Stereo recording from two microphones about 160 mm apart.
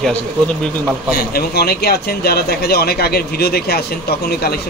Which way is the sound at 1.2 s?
75° left (ahead or behind).